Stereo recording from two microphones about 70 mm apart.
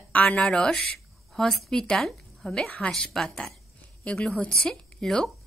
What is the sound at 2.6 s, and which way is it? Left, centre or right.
Speech, centre.